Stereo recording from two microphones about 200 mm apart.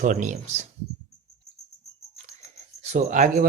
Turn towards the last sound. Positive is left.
turn(degrees=-40)  # may be behind; listen again after turning